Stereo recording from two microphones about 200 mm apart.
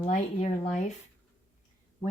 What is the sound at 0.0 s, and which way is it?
Speech, 35° left (ahead or behind).